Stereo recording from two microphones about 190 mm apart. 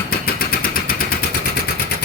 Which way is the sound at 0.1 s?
50° left (ahead or behind).